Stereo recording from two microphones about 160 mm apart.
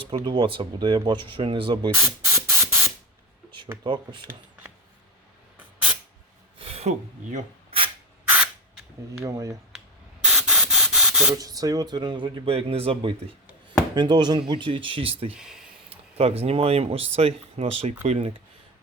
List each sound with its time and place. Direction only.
0.0 s speech: 30° right (ahead or behind)
1.9 s spray: 15° right (ahead or behind)
3.8 s speech: 30° right (ahead or behind)
6.6 s speech: 40° right (ahead or behind)
9.2 s speech: 20° right (ahead or behind)
10.2 s a sound: 5° right (ahead or behind)
11.3 s speech: 25° right (ahead or behind)
15.3 s a sound: 5° right (ahead or behind)
15.9 s speech: 40° right (ahead or behind)